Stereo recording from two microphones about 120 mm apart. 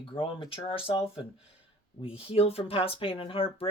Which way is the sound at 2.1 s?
55° left (ahead or behind).